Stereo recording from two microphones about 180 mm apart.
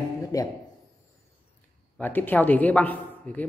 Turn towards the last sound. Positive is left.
turn(degrees=10)  # may be behind; listen again after turning